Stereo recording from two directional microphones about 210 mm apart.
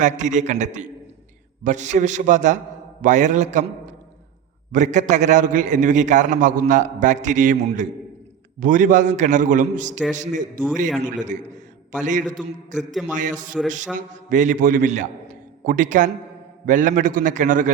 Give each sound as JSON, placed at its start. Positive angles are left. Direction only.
{"t": 0.0, "sound": "a man's voice", "side_deg": -35}
{"t": 4.7, "sound": "a man's voice", "side_deg": -35}
{"t": 12.7, "sound": "a man's voice", "side_deg": 0}
{"t": 13.1, "sound": "a man's voice", "side_deg": -35}